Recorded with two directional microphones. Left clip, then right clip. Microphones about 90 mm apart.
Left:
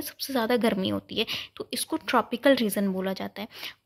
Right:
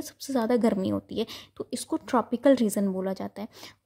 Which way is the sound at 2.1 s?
50° right (ahead or behind).